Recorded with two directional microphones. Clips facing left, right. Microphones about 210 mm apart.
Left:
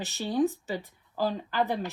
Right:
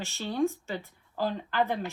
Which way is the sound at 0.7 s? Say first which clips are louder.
Left 2 dB; 15° left (ahead or behind).